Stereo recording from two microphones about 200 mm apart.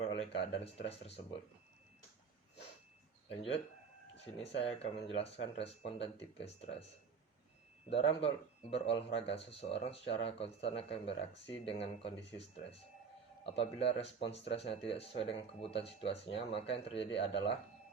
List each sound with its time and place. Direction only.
0.0 s speech: 30° left (ahead or behind)
3.2 s speech: 30° left (ahead or behind)
7.9 s speech: 30° left (ahead or behind)
13.4 s speech: 30° left (ahead or behind)